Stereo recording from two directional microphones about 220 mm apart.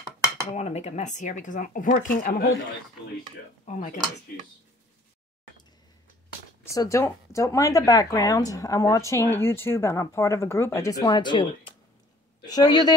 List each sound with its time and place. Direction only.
0.5 s speech: 30° left (ahead or behind)
3.6 s speech: 35° left (ahead or behind)
6.6 s speech: 15° left (ahead or behind)